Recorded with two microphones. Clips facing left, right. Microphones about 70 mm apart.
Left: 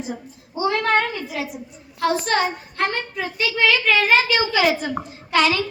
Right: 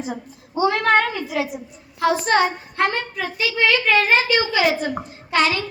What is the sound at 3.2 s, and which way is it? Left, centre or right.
Speech, centre.